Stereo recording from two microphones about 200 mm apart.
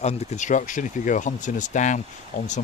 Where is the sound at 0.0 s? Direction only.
35° left (ahead or behind).